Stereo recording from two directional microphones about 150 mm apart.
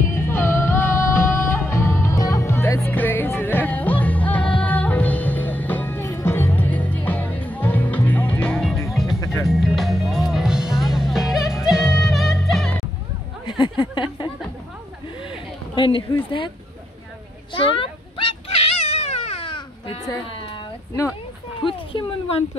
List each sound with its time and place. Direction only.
0.1 s music: 15° left (ahead or behind)
13.5 s a sound: 35° left (ahead or behind)
15.7 s speech: 35° left (ahead or behind)
17.6 s cat: 35° left (ahead or behind)
21.6 s speech: 35° left (ahead or behind)